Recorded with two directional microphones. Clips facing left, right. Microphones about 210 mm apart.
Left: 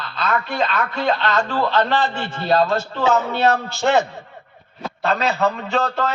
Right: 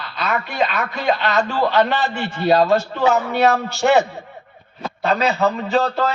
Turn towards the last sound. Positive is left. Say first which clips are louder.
# right 3 dB
turn(degrees=-5)  # may be behind; listen again after turning